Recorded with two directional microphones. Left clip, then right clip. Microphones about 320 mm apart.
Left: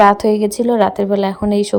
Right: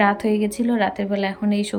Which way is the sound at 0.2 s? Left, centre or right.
Centre.